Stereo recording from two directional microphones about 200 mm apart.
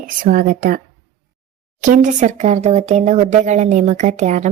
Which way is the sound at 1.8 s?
40° right (ahead or behind).